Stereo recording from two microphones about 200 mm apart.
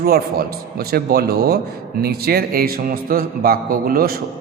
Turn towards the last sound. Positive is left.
turn(degrees=-50)  # may be behind; listen again after turning